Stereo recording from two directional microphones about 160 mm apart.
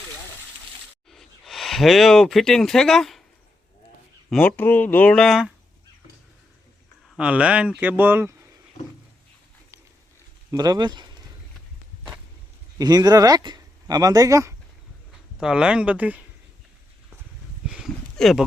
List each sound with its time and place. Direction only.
1.1 s speech: centre (ahead or behind)
4.3 s speech: 10° left (ahead or behind)
7.2 s speech: 5° right (ahead or behind)
10.5 s speech: 25° right (ahead or behind)
12.8 s speech: 25° right (ahead or behind)
15.4 s speech: 5° right (ahead or behind)
17.7 s a sound: 5° right (ahead or behind)